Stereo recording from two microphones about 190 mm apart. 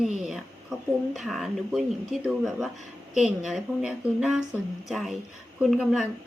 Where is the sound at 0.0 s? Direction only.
Centre (ahead or behind).